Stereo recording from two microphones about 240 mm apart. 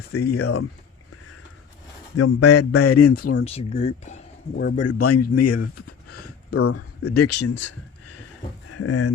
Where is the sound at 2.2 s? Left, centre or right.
Left.